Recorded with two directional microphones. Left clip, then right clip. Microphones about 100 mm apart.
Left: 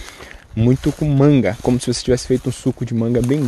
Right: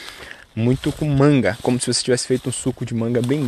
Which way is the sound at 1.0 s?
25° left (ahead or behind).